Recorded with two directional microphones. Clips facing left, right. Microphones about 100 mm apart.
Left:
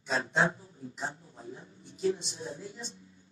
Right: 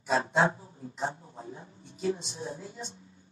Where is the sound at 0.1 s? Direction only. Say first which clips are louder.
Right 3 dB; 30° right (ahead or behind).